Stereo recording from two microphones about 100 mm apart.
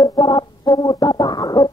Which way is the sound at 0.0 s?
40° left (ahead or behind).